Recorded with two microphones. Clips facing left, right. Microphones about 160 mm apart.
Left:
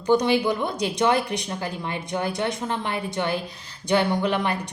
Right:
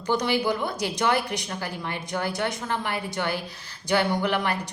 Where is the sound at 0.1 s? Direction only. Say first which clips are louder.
Left 4 dB; 20° left (ahead or behind).